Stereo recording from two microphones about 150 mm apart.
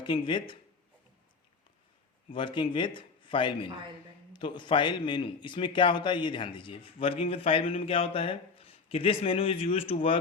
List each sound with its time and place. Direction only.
0.0 s a man's voice: 35° left (ahead or behind)
2.3 s a man's voice: 35° left (ahead or behind)